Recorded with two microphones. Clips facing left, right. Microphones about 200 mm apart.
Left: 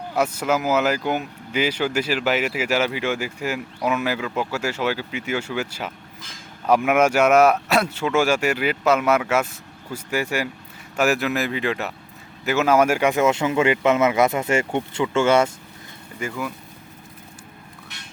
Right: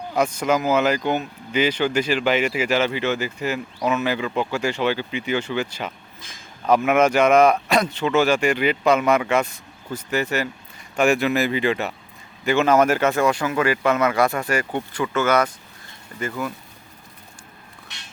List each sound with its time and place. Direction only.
0.1 s speech: 5° left (ahead or behind); by 15.5 s 25° left (ahead or behind)
16.2 s speech: 10° left (ahead or behind)